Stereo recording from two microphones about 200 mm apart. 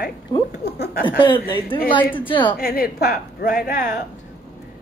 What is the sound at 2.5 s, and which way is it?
A woman's voice, 50° left (ahead or behind).